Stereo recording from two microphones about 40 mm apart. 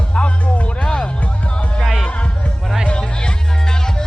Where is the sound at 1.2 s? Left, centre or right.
Left.